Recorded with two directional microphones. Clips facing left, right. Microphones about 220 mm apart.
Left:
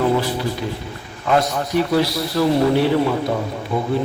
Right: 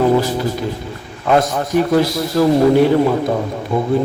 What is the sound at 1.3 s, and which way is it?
A man's voice, 45° right (ahead or behind).